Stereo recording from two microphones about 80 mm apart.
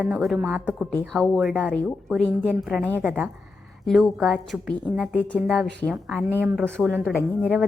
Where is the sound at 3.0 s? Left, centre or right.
Right.